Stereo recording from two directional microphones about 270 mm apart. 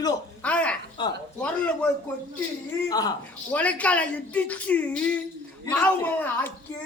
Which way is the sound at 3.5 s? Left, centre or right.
Centre.